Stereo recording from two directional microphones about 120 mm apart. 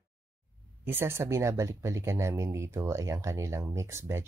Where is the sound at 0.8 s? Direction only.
20° right (ahead or behind).